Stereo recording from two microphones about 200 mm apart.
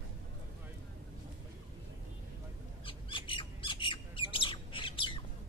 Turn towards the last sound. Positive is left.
turn(degrees=25)  # may be behind; listen again after turning